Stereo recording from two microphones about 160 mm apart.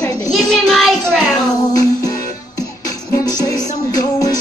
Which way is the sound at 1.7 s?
25° left (ahead or behind).